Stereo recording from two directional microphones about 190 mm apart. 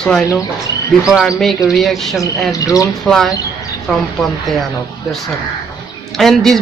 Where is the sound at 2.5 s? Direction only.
20° left (ahead or behind).